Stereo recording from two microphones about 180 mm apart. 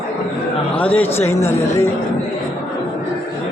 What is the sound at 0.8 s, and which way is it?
Speech, 10° left (ahead or behind).